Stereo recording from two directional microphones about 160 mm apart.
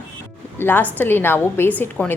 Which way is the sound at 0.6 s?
10° left (ahead or behind).